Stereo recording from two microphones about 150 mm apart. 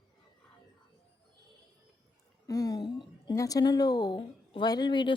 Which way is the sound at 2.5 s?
25° left (ahead or behind).